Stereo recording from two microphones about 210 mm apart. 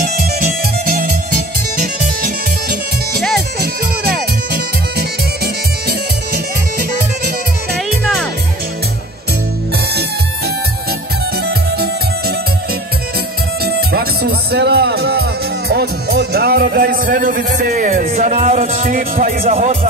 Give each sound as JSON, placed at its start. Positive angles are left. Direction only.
{"t": 0.0, "sound": "music", "side_deg": -45}
{"t": 3.2, "sound": "music", "side_deg": 0}
{"t": 4.5, "sound": "music", "side_deg": -50}
{"t": 7.7, "sound": "music", "side_deg": 0}
{"t": 13.7, "sound": "music", "side_deg": -50}
{"t": 18.9, "sound": "speech", "side_deg": -40}